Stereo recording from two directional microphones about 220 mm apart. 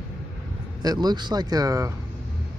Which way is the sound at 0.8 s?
20° right (ahead or behind).